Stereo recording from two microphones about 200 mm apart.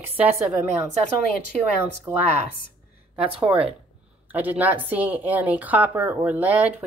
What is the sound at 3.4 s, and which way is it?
A woman's voice, 5° right (ahead or behind).